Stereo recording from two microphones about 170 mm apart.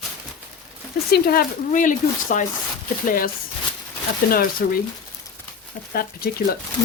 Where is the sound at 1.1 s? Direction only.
60° left (ahead or behind).